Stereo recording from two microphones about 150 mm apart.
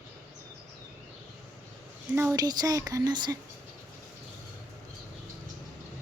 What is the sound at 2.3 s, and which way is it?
Child singing, 25° right (ahead or behind).